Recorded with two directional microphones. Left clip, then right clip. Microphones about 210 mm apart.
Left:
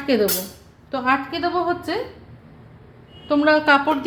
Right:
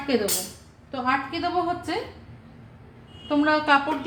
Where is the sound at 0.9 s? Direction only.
45° left (ahead or behind).